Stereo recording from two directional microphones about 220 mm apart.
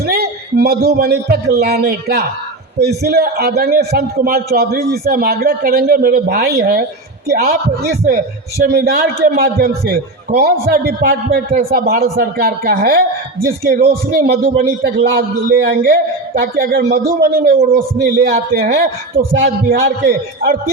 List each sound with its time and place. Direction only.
0.0 s a man's voice: 45° right (ahead or behind)
8.0 s a man's voice: 40° right (ahead or behind)